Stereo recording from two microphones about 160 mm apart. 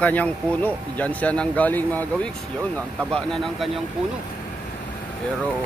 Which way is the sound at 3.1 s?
5° left (ahead or behind).